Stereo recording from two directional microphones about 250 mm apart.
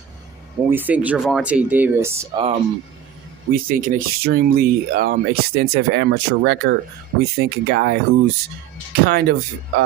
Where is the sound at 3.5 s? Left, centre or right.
Right.